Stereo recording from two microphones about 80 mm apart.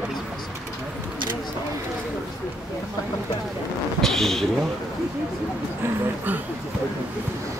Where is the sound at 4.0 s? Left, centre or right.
Centre.